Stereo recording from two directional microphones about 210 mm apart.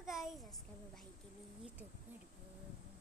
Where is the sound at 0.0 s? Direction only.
Centre (ahead or behind).